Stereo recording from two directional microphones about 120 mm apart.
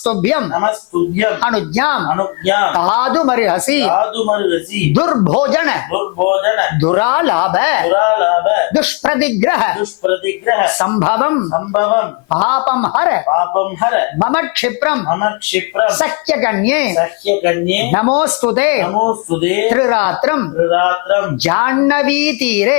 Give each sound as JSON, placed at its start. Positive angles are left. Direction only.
{"t": 0.0, "sound": "speech", "side_deg": 20}
{"t": 18.9, "sound": "speech", "side_deg": 30}
{"t": 19.4, "sound": "speech", "side_deg": 20}